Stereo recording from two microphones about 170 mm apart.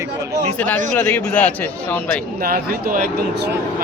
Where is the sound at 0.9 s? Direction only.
10° left (ahead or behind).